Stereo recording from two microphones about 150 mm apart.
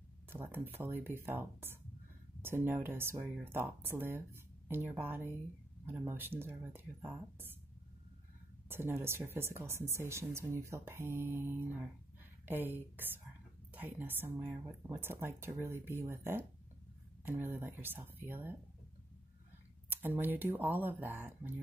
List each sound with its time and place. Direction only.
0.3 s speech: 15° right (ahead or behind)
8.6 s speech: 15° right (ahead or behind)
19.9 s speech: 15° right (ahead or behind)